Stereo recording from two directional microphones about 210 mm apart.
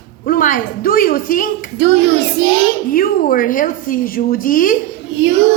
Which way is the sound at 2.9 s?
40° left (ahead or behind).